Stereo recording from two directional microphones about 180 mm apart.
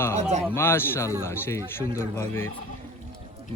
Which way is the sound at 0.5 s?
15° left (ahead or behind).